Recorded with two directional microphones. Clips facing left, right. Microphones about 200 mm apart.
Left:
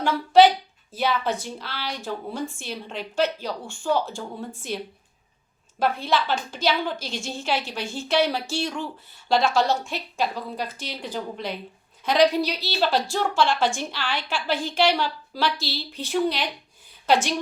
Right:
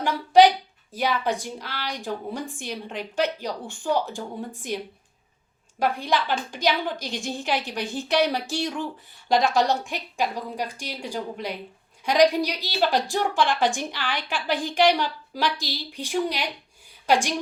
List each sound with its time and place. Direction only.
0.0 s a woman's voice: 15° right (ahead or behind)
5.8 s a woman's voice: 15° right (ahead or behind)